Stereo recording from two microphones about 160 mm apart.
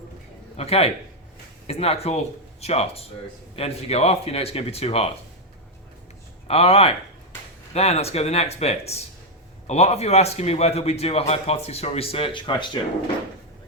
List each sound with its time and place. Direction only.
0.5 s a man's voice: 40° left (ahead or behind)
6.5 s a man's voice: 40° left (ahead or behind)